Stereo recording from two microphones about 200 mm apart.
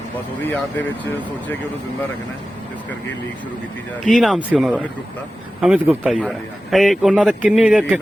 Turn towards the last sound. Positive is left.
turn(degrees=-5)  # may be behind; listen again after turning